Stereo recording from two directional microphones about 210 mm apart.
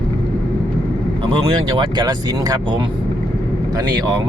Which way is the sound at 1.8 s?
20° right (ahead or behind).